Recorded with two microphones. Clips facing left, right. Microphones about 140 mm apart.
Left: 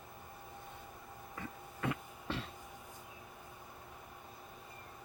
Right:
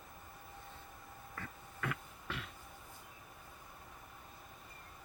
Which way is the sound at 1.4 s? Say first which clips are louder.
Left 3 dB; 25° left (ahead or behind).